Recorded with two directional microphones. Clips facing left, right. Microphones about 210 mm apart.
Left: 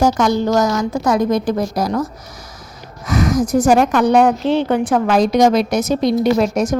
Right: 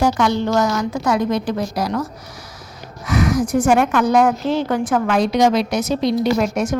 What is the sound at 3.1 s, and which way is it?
A woman's voice, 45° left (ahead or behind).